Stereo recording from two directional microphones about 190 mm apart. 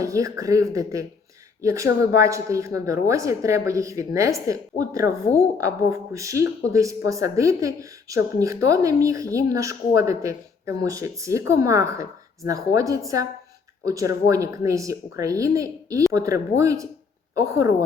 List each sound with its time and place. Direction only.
0.0 s speech: 15° right (ahead or behind)